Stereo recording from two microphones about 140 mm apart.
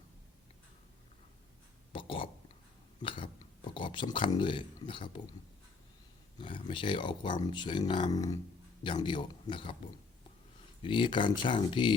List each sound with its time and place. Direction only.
1.9 s speech: 40° left (ahead or behind)
6.4 s speech: 35° left (ahead or behind)
10.8 s speech: 35° left (ahead or behind)